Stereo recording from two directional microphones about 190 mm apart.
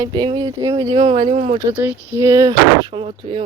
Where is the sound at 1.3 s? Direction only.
40° right (ahead or behind).